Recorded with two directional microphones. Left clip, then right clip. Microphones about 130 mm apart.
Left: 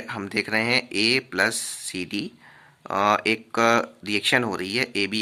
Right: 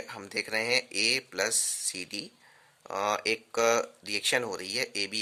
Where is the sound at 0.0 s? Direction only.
25° right (ahead or behind).